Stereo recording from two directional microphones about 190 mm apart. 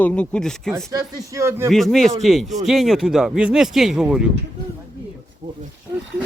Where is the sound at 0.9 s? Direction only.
15° right (ahead or behind).